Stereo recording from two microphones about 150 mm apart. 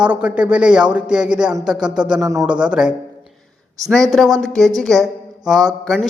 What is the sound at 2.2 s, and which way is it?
Speech, 20° right (ahead or behind).